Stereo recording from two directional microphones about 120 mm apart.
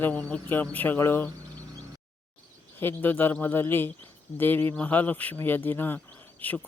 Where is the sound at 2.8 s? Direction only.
15° left (ahead or behind).